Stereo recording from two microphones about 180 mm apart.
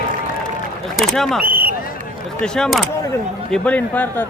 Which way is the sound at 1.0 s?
Centre (ahead or behind).